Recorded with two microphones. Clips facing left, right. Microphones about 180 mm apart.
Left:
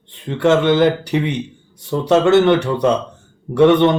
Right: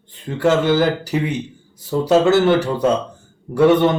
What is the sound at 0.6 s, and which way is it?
Speech, 5° right (ahead or behind).